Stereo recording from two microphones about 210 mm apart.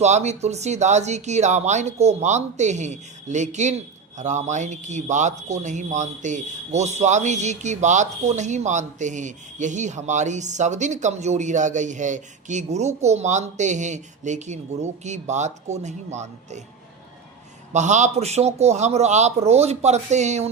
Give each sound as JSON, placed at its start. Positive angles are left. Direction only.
{"t": 0.0, "sound": "a man's voice", "side_deg": -30}
{"t": 17.7, "sound": "a man's voice", "side_deg": -35}